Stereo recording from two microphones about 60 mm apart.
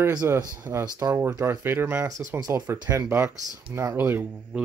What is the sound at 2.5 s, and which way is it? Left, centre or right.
Speech, right.